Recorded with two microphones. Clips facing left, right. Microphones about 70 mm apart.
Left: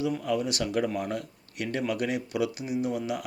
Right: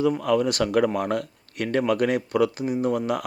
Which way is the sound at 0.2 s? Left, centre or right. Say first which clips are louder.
Right 7 dB; right.